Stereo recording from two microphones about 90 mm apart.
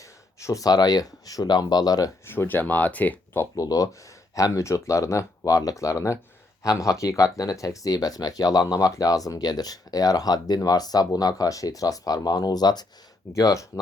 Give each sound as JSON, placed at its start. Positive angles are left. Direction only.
{"t": 0.3, "sound": "speech", "side_deg": 35}
{"t": 2.2, "sound": "speech", "side_deg": 25}
{"t": 3.5, "sound": "speech", "side_deg": 40}
{"t": 13.3, "sound": "speech", "side_deg": 35}